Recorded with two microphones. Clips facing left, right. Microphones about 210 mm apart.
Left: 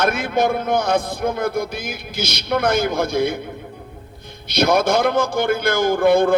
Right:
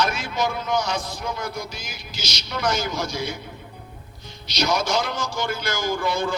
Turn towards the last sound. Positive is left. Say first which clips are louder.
# left 10 dB
turn(degrees=55)  # may be behind; listen again after turning